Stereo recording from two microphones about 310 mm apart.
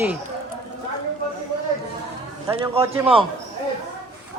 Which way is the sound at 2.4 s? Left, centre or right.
Centre.